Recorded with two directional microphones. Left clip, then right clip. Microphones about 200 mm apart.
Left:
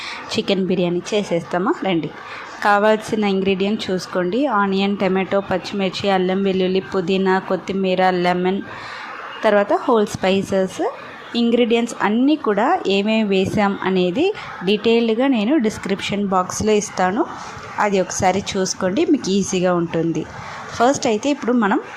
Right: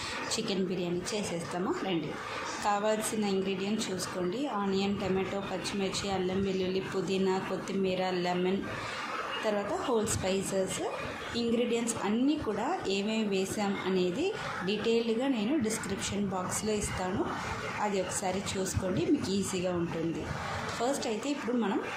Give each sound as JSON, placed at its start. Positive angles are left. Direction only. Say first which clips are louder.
{"t": 0.3, "sound": "speech", "louder": "left 17 dB", "side_deg": 35}
{"t": 20.8, "sound": "speech", "louder": "left 17 dB", "side_deg": 40}